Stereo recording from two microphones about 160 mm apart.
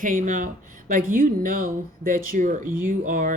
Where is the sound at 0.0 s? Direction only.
55° right (ahead or behind).